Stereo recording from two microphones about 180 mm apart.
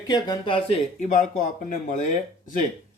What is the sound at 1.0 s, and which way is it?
Speech, 45° left (ahead or behind).